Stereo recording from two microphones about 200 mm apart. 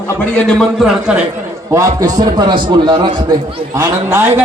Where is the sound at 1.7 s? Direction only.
15° right (ahead or behind).